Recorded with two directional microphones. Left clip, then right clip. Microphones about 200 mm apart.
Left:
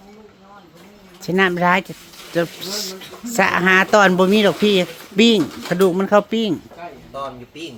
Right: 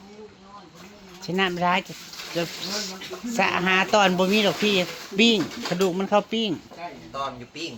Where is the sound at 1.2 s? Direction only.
45° left (ahead or behind).